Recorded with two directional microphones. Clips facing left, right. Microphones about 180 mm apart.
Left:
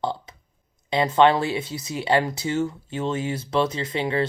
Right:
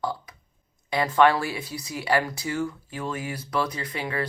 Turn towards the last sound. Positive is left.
turn(degrees=25)  # may be behind; listen again after turning